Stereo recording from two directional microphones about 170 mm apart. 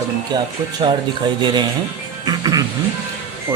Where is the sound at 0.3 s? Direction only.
25° right (ahead or behind).